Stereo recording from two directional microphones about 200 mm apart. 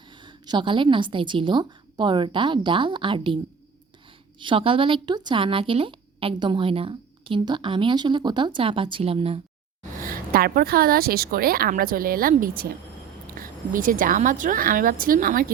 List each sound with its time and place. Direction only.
0.1 s speech: 25° right (ahead or behind)
4.4 s speech: 25° right (ahead or behind)
10.0 s a woman's voice: 45° right (ahead or behind)